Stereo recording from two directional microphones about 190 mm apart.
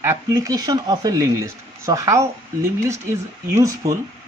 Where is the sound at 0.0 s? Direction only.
15° right (ahead or behind).